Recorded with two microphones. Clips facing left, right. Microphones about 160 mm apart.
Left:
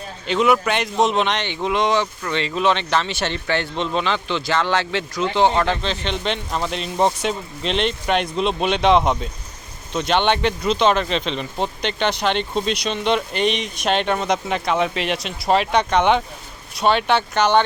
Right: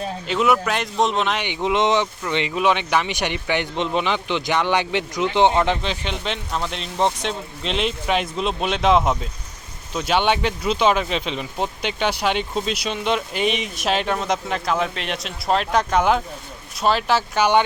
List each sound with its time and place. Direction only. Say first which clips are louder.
0.3 s speech: left 2 dB; centre (ahead or behind)
1.5 s speech: right 1 dB; 15° right (ahead or behind)
6.2 s speech: left 2 dB; centre (ahead or behind)